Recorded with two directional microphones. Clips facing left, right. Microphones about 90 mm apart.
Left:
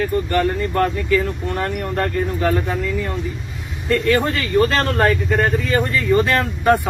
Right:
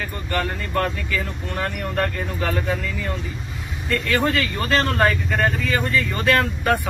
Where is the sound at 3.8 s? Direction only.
35° left (ahead or behind).